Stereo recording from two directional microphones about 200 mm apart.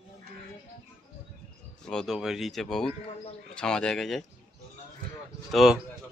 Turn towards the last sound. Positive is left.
turn(degrees=0)  # may be behind; listen again after turning